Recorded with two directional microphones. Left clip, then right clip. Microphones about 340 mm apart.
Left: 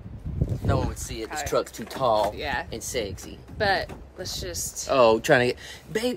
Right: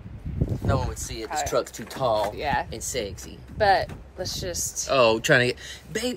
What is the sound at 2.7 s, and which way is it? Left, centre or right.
Speech, centre.